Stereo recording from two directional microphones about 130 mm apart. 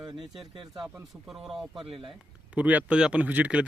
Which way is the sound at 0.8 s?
5° right (ahead or behind).